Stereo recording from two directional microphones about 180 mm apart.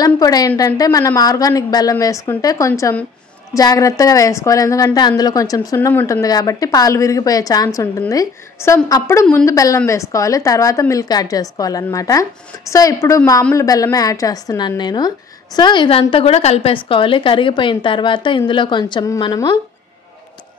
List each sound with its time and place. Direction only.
0.0 s a woman's voice: 20° left (ahead or behind)